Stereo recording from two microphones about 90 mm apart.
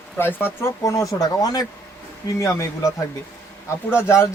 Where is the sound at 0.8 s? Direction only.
35° left (ahead or behind).